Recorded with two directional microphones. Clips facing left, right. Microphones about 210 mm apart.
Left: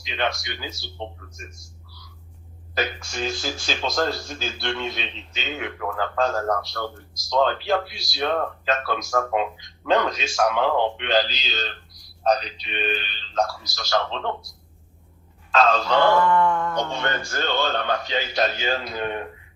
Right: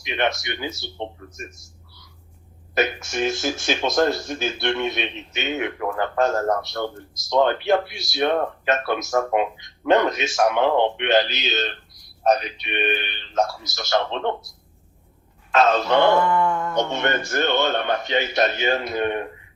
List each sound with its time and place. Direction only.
0.1 s a man's voice: 20° right (ahead or behind)
1.5 s a sound: 25° right (ahead or behind)
2.7 s a man's voice: 20° right (ahead or behind)
12.6 s speech: 60° right (ahead or behind)
13.3 s a man's voice: 25° right (ahead or behind)
15.5 s speech: 20° right (ahead or behind)
16.9 s a man's voice: 20° right (ahead or behind)